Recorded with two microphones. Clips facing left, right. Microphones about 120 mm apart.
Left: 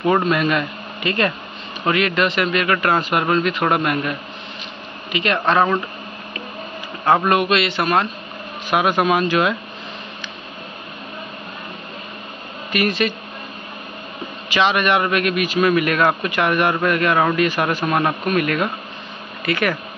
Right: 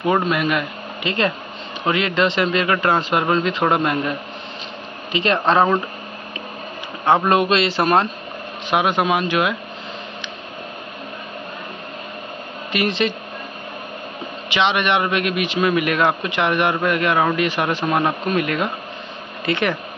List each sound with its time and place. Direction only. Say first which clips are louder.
0.0 s a man's voice: left 1 dB; 15° right (ahead or behind)
5.1 s a man's voice: right 1 dB; 30° right (ahead or behind)
7.2 s a man's voice: right 1 dB; 30° right (ahead or behind)
8.6 s a man's voice: left 1 dB; 20° right (ahead or behind)
12.7 s a man's voice: left 1 dB; 25° right (ahead or behind)
14.5 s a man's voice: left 1 dB; 20° right (ahead or behind)